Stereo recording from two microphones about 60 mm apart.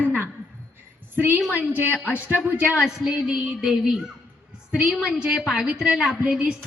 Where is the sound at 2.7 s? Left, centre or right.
Centre.